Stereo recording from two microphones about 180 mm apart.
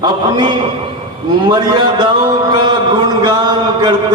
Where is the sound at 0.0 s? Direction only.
25° right (ahead or behind).